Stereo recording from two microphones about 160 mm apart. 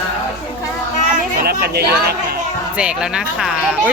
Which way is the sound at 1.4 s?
80° right.